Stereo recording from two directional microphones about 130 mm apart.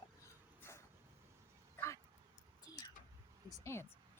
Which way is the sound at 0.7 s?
20° left (ahead or behind).